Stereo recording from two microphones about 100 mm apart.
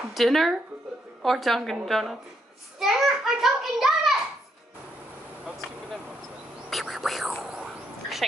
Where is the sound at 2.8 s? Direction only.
Centre (ahead or behind).